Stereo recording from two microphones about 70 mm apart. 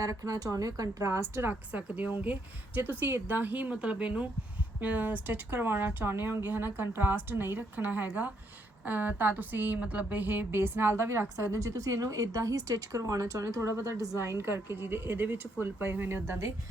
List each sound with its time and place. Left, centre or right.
0.0 s speech: right
1.5 s a woman's voice: right